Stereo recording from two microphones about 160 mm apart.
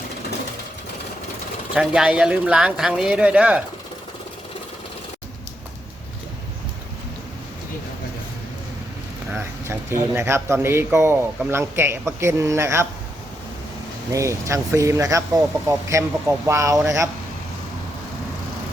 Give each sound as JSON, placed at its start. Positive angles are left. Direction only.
{"t": 1.7, "sound": "speech", "side_deg": -5}
{"t": 9.3, "sound": "speech", "side_deg": -15}
{"t": 14.1, "sound": "speech", "side_deg": -20}